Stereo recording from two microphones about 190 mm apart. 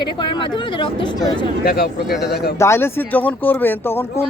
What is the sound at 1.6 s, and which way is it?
Speech, 55° left (ahead or behind).